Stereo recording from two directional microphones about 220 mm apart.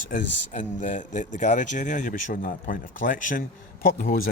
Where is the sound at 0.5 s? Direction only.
35° left (ahead or behind).